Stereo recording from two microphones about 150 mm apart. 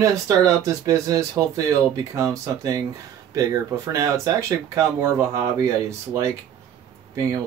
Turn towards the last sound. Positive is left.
turn(degrees=-20)  # may be behind; listen again after turning